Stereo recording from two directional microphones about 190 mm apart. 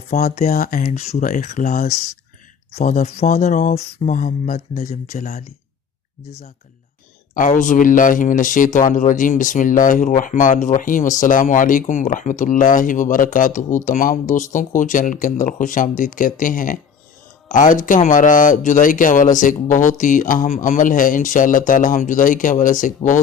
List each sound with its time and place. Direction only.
0.1 s speech: 40° left (ahead or behind)
7.3 s speech: 45° left (ahead or behind)